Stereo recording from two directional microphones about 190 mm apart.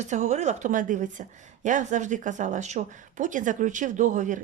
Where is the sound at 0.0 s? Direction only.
40° right (ahead or behind).